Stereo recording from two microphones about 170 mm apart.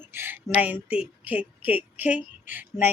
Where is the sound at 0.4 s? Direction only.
10° right (ahead or behind).